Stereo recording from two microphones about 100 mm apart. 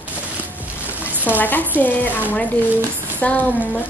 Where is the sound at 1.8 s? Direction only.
15° left (ahead or behind).